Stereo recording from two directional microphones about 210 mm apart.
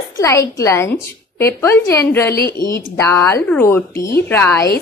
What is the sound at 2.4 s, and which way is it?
Speech, 50° left (ahead or behind).